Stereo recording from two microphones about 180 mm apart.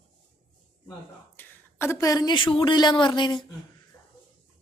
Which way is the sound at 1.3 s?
15° left (ahead or behind).